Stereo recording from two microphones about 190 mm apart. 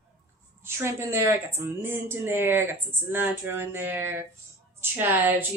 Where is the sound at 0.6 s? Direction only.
15° right (ahead or behind).